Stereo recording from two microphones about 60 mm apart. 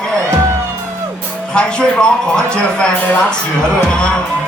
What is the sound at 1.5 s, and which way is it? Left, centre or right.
Music, centre.